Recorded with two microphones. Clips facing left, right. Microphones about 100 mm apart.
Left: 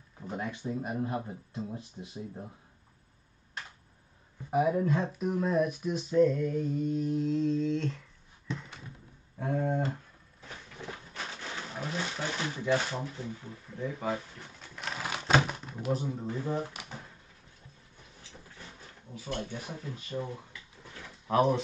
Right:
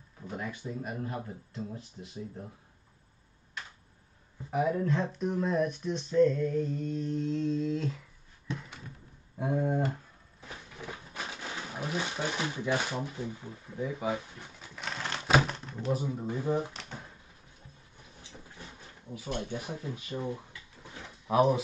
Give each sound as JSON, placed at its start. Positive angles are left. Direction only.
{"t": 0.3, "sound": "speech", "side_deg": 20}
{"t": 4.5, "sound": "speech", "side_deg": 10}
{"t": 9.4, "sound": "speech", "side_deg": -15}
{"t": 10.8, "sound": "a sound", "side_deg": -15}
{"t": 15.5, "sound": "door", "side_deg": 10}
{"t": 15.9, "sound": "speech", "side_deg": -5}
{"t": 16.7, "sound": "drawer open or close", "side_deg": 10}
{"t": 19.1, "sound": "speech", "side_deg": -15}
{"t": 21.3, "sound": "speech", "side_deg": -5}